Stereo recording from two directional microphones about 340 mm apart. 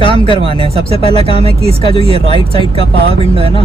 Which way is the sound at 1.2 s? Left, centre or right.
Centre.